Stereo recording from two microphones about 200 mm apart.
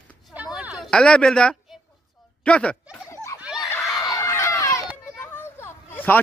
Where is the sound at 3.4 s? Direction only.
5° right (ahead or behind).